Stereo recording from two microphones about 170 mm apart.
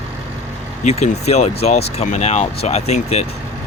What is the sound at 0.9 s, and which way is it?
Speech, 40° left (ahead or behind).